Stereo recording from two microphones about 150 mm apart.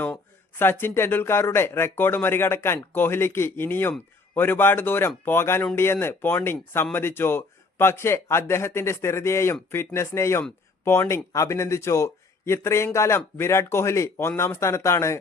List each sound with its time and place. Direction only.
0.0 s speech: 15° left (ahead or behind)